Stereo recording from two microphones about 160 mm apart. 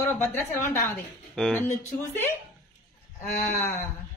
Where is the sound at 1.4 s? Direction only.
5° left (ahead or behind).